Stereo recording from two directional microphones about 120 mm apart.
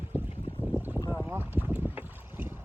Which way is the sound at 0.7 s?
15° right (ahead or behind).